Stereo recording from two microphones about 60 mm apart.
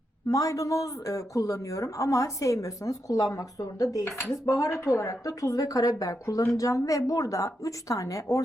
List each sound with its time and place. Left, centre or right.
0.3 s speech: left
4.7 s speech: left
6.5 s speech: left